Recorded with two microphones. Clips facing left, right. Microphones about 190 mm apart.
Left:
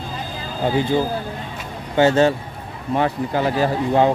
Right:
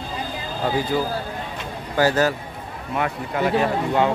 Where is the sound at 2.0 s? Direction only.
25° left (ahead or behind).